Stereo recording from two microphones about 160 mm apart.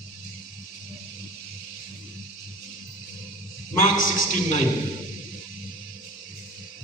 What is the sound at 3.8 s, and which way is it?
Speech, 50° left (ahead or behind).